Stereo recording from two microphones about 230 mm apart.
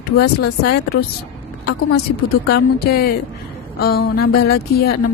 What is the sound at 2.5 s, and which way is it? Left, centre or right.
A woman's voice, left.